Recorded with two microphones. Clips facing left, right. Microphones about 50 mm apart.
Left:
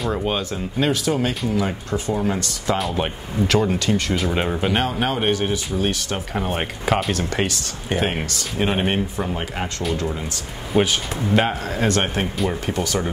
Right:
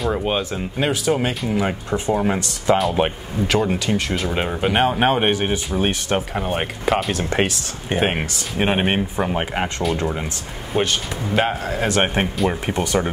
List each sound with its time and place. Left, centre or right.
0.0 s speech: centre
3.3 s speech: centre
4.8 s speech: right
6.3 s speech: centre
7.2 s speech: right
11.2 s speech: centre
12.0 s speech: right